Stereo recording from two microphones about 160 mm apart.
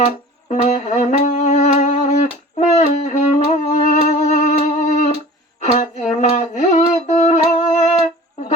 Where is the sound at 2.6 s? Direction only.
45° left (ahead or behind).